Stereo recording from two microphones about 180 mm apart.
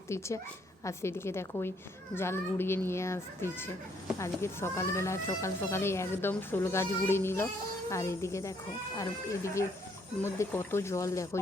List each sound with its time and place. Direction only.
0.1 s speech: 15° left (ahead or behind)